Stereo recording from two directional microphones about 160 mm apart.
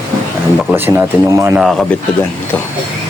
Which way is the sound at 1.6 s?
Centre (ahead or behind).